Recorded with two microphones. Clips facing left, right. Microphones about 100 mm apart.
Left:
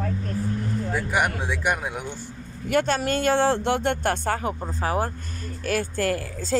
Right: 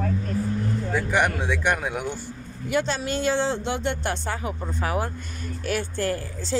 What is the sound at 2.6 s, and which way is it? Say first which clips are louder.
Speech: left 3 dB; 55° left (ahead or behind).